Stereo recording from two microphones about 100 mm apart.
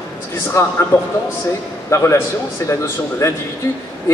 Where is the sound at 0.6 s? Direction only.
30° left (ahead or behind).